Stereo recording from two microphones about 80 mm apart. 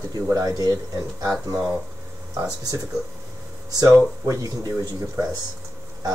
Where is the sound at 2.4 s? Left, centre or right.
Right.